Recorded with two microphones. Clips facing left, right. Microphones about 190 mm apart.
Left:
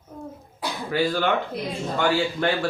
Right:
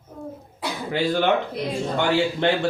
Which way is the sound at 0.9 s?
20° right (ahead or behind).